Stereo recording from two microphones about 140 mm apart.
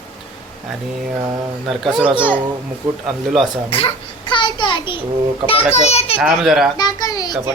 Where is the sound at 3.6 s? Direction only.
40° left (ahead or behind).